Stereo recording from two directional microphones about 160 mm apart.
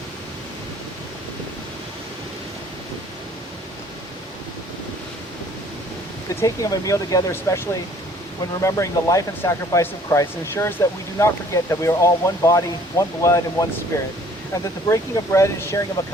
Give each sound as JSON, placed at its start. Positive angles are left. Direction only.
{"t": 6.4, "sound": "speech", "side_deg": 20}
{"t": 8.6, "sound": "speech", "side_deg": 20}